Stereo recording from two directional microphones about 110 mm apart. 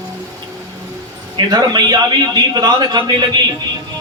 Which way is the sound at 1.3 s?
40° right (ahead or behind).